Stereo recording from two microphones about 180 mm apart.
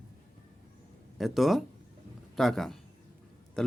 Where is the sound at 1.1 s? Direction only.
Centre (ahead or behind).